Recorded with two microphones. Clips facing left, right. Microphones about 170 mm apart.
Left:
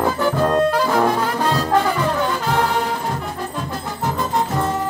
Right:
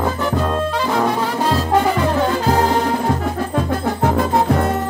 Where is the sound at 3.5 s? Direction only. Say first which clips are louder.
Right 8 dB; 60° right (ahead or behind).